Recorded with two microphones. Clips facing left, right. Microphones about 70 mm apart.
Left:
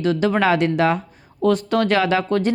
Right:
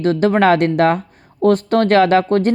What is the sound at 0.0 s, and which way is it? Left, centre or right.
Speech, right.